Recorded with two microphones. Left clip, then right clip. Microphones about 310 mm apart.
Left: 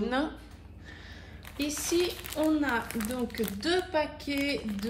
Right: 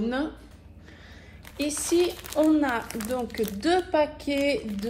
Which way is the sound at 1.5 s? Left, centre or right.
Right.